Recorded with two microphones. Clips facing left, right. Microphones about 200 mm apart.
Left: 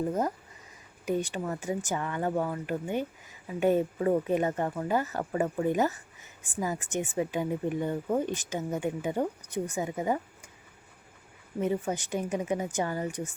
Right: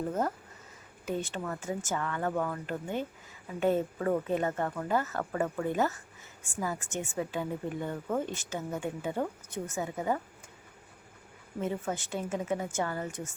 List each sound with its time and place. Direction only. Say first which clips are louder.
0.1 s speech: left 2 dB; 15° left (ahead or behind)
11.6 s speech: left 4 dB; 15° left (ahead or behind)